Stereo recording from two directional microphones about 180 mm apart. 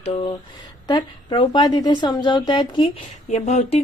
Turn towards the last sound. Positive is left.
turn(degrees=40)  # may be behind; listen again after turning